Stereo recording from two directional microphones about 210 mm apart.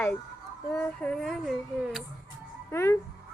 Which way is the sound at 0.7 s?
5° left (ahead or behind).